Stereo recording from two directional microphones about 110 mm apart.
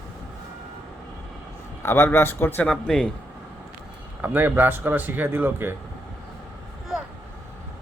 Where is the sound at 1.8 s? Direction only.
20° left (ahead or behind).